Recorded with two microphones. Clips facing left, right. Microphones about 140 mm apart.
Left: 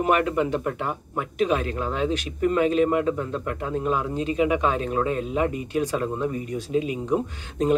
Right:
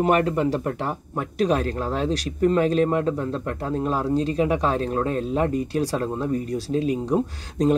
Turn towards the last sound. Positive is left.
turn(degrees=-35)  # may be behind; listen again after turning